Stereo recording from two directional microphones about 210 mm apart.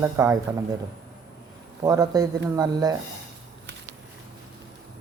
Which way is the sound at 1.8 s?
15° right (ahead or behind).